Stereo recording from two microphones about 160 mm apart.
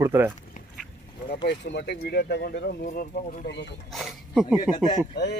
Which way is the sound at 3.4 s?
90° left.